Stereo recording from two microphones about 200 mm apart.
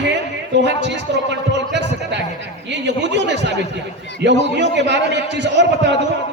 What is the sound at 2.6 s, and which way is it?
A man's voice, 60° right (ahead or behind).